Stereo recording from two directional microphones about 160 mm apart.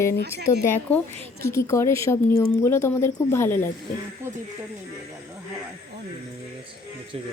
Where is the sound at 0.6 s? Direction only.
10° left (ahead or behind).